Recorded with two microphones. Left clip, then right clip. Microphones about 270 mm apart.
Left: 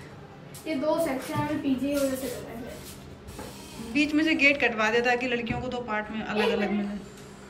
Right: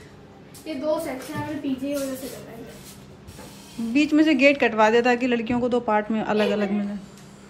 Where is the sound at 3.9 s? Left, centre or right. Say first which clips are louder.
Right 5 dB; centre.